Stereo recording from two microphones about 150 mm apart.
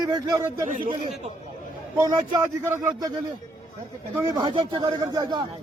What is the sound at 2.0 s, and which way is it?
Speech, 25° right (ahead or behind).